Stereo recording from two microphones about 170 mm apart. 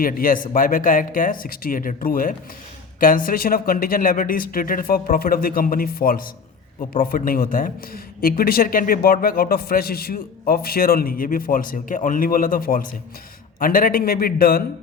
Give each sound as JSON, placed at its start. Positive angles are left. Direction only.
{"t": 0.0, "sound": "speech", "side_deg": 55}